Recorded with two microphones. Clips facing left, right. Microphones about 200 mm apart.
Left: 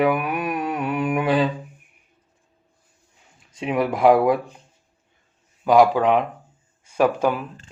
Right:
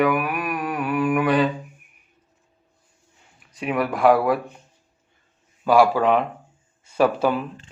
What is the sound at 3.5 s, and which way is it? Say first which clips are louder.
Speech: left 1 dB; 25° left (ahead or behind).